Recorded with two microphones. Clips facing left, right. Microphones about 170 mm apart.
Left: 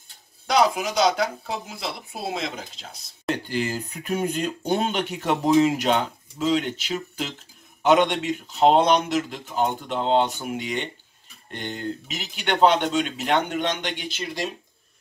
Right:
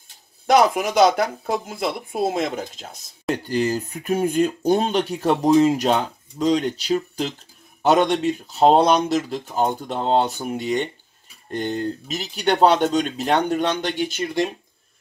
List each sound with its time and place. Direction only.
0.5 s speech: 55° right (ahead or behind)